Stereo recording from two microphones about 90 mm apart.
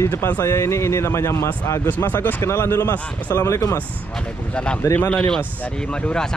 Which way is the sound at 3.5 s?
35° left (ahead or behind).